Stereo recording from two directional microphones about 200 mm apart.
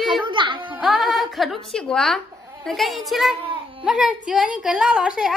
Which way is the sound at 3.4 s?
25° right (ahead or behind).